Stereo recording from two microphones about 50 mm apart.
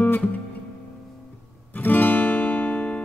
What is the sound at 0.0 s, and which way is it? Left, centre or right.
Music, left.